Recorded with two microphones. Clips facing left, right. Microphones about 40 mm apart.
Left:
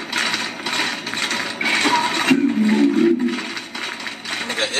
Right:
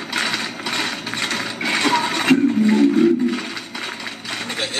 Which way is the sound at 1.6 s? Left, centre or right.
Centre.